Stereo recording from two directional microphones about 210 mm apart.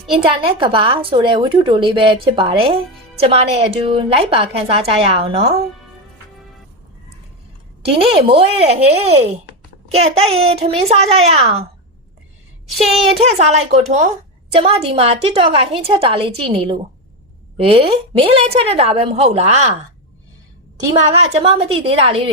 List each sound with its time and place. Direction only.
0.1 s a woman's voice: 25° right (ahead or behind)
7.8 s a woman's voice: 25° right (ahead or behind)
12.6 s a woman's voice: centre (ahead or behind)
14.5 s a woman's voice: 30° right (ahead or behind)
21.1 s a woman's voice: 30° right (ahead or behind)